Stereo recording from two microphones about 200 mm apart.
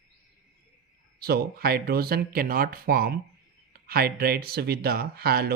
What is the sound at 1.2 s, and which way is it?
Speech, 50° right (ahead or behind).